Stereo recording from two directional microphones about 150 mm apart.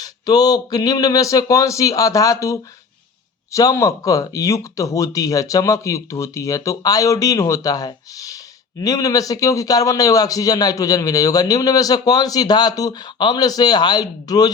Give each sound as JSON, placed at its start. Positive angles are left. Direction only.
{"t": 0.0, "sound": "a man's voice", "side_deg": 25}